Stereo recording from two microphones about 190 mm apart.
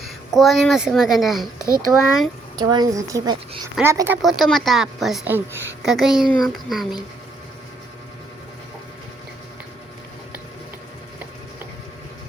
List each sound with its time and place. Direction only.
0.0 s a woman's voice: centre (ahead or behind)
2.6 s speech: 20° right (ahead or behind)
4.2 s a woman's voice: centre (ahead or behind)